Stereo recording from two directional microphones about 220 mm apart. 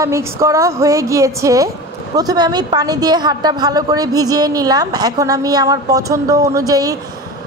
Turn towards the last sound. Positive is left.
turn(degrees=-15)  # may be behind; listen again after turning